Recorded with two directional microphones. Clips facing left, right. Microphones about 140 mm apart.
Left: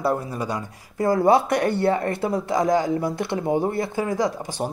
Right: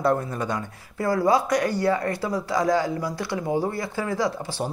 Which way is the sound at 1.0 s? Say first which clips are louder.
Left 3 dB; 25° left (ahead or behind).